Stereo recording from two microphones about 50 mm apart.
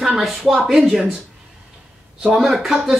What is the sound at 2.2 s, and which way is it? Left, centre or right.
Speech, centre.